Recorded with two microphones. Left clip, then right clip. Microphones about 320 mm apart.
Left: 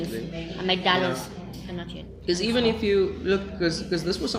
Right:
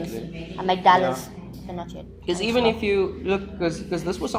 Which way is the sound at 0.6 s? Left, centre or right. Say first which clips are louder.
Right 6 dB; centre.